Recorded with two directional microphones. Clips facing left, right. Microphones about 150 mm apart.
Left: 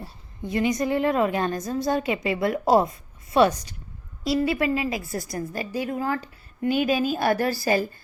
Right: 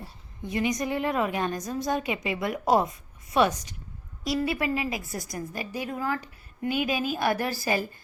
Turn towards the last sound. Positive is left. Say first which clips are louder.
# left 5 dB
turn(degrees=35)  # may be behind; listen again after turning